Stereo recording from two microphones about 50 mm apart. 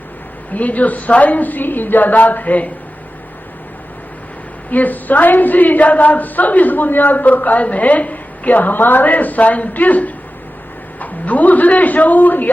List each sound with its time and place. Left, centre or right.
0.5 s a woman's voice: left
4.7 s a woman's voice: left